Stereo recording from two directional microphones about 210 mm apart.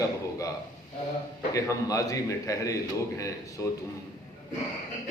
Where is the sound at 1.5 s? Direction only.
15° left (ahead or behind).